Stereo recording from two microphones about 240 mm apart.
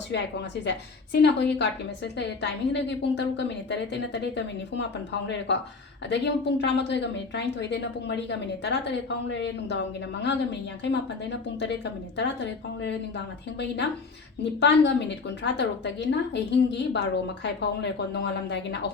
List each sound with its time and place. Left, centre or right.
0.1 s a woman's voice: left
6.1 s a woman's voice: left